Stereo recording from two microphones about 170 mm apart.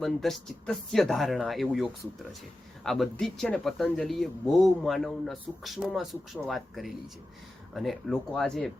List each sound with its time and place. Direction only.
0.0 s speech: centre (ahead or behind)